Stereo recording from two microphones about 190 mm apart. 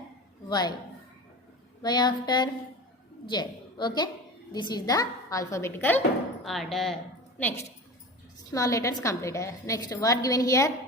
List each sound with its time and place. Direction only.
0.4 s a woman's voice: 20° left (ahead or behind)
1.8 s child singing: 20° left (ahead or behind)
3.2 s a woman's voice: 20° left (ahead or behind)